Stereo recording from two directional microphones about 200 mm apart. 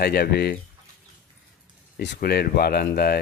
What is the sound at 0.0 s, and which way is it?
Speech, 55° left (ahead or behind).